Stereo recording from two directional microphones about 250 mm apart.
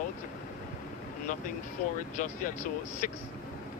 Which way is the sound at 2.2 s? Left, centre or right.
Left.